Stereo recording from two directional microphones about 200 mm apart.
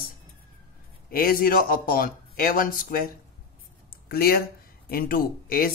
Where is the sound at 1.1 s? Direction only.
45° left (ahead or behind).